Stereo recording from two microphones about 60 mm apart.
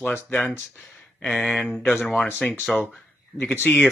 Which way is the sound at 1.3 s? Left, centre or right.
Centre.